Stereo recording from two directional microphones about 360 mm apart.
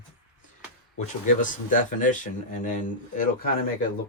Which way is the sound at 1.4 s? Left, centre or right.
Left.